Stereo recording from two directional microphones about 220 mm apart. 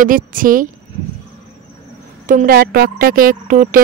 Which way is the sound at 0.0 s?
40° right (ahead or behind).